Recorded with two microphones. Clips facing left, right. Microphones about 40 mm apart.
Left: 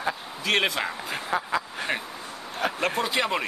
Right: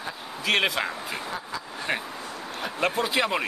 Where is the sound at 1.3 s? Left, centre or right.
Left.